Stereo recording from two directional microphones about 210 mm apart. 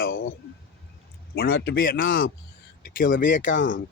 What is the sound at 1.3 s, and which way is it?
Speech, 45° left (ahead or behind).